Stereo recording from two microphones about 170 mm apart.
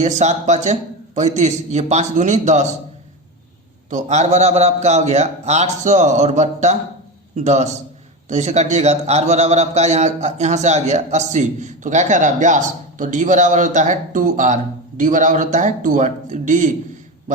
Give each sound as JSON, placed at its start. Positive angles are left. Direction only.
{"t": 0.0, "sound": "a man's voice", "side_deg": -45}
{"t": 3.8, "sound": "a man's voice", "side_deg": -45}